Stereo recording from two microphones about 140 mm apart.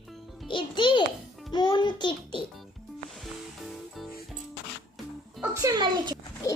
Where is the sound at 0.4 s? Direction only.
35° left (ahead or behind).